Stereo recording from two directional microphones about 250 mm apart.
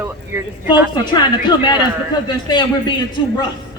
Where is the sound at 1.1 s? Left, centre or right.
Centre.